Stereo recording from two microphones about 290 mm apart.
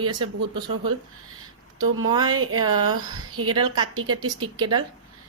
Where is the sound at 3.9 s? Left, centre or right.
Right.